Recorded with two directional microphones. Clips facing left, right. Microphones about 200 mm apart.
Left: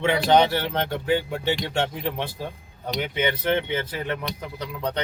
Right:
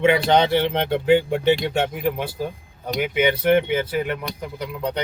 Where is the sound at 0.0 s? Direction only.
20° right (ahead or behind).